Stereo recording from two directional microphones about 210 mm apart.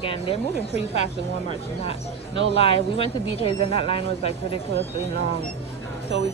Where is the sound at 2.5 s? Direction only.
25° left (ahead or behind).